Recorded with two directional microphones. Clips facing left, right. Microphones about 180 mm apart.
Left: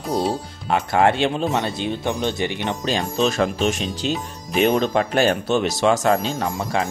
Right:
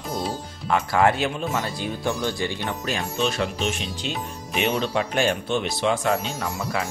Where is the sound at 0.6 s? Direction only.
25° left (ahead or behind).